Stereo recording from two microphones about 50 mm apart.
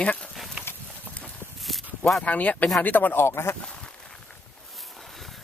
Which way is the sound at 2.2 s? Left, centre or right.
Left.